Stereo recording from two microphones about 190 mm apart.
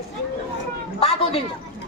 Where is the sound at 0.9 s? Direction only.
30° left (ahead or behind).